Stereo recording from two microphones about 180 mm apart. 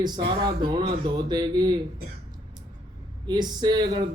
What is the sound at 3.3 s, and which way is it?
Speech, 25° right (ahead or behind).